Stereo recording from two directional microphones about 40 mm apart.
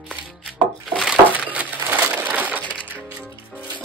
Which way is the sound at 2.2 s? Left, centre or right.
Right.